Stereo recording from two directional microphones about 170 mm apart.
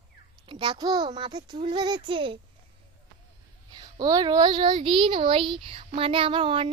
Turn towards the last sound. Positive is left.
turn(degrees=-30)  # may be behind; listen again after turning